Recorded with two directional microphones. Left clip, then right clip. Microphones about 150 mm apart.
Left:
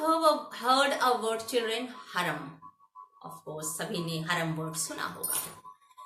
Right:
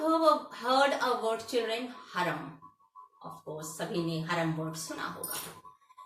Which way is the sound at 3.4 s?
15° left (ahead or behind).